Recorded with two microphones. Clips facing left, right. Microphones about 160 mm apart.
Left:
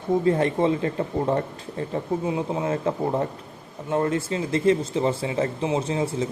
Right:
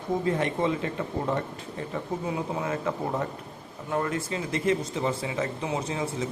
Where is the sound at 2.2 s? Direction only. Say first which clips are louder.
Left 5 dB; 20° left (ahead or behind).